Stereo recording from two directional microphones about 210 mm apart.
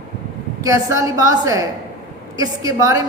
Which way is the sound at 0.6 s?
15° right (ahead or behind).